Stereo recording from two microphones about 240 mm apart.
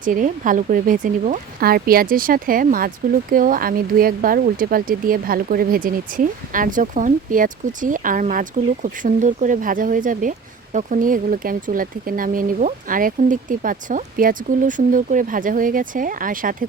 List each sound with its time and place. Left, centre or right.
0.0 s speech: right